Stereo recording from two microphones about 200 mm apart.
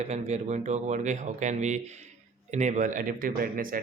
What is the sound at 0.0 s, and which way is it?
Speech, 35° right (ahead or behind).